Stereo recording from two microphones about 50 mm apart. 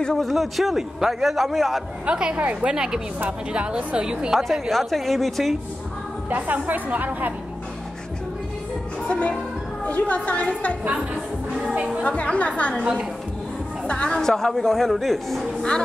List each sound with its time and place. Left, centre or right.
0.2 s a man's voice: centre
2.0 s a woman's voice: centre
4.3 s a man's voice: centre
6.3 s a woman's voice: right
9.0 s music: left
9.8 s a woman's voice: left
12.0 s a woman's voice: left
13.8 s a woman's voice: left; by 15.4 s centre